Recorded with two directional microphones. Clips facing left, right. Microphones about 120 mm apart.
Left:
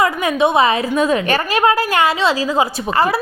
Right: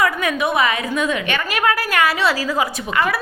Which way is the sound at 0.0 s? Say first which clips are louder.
Left 4 dB; 25° left (ahead or behind).